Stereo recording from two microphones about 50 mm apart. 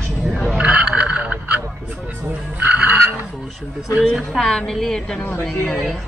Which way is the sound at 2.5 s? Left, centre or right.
Right.